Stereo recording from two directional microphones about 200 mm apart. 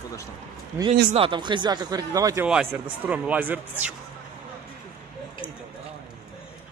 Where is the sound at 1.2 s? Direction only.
25° right (ahead or behind).